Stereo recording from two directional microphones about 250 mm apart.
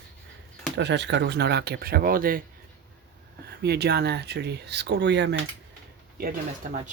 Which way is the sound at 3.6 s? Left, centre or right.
Right.